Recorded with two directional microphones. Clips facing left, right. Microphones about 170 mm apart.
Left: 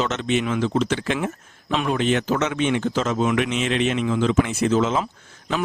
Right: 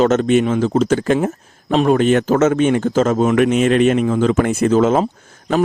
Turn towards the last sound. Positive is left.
turn(degrees=-40)  # may be behind; listen again after turning